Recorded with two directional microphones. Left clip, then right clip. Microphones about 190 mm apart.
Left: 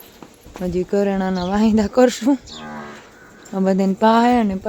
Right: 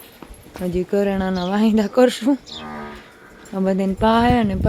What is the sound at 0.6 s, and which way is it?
Speech, 5° left (ahead or behind).